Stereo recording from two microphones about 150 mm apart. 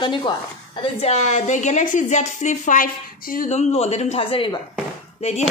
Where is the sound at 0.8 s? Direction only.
45° left (ahead or behind).